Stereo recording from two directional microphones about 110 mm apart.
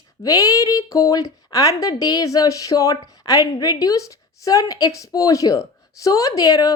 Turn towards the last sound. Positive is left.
turn(degrees=35)  # may be behind; listen again after turning